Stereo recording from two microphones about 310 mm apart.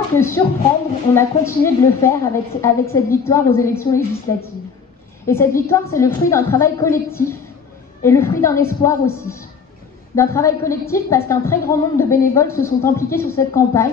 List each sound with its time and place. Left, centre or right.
0.1 s a woman's voice: centre
5.2 s a woman's voice: centre